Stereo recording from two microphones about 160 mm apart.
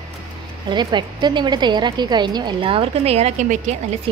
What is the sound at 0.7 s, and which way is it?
A woman's voice, 30° right (ahead or behind).